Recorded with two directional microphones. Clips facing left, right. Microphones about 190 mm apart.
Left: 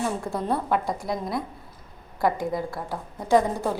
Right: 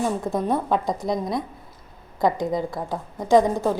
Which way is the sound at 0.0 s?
15° right (ahead or behind).